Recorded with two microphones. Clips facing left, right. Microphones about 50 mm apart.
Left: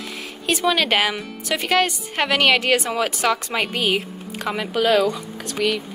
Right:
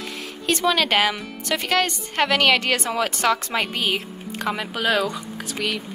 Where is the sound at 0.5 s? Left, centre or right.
Centre.